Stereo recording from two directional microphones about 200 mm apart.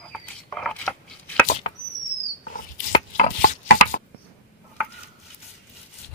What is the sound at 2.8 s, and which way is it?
Chopping, 40° left (ahead or behind).